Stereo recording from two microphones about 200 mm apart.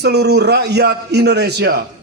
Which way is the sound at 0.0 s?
55° right (ahead or behind).